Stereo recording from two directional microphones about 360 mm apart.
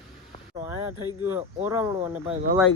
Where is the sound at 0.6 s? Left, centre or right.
Centre.